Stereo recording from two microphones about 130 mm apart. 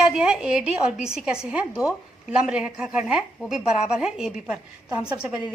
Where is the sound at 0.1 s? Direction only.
5° right (ahead or behind).